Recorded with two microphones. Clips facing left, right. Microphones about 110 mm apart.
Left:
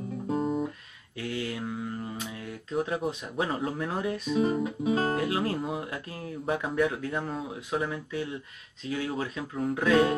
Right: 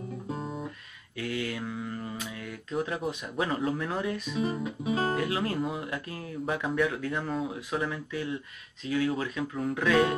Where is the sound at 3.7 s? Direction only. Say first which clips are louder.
Even; 35° left (ahead or behind).